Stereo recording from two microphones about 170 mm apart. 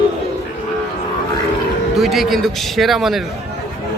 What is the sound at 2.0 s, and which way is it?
A man's voice, centre (ahead or behind).